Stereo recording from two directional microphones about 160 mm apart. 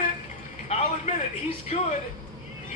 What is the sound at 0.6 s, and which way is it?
A man's voice, 50° left (ahead or behind).